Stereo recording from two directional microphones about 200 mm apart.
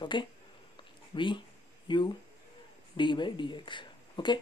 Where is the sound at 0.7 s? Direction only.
25° left (ahead or behind).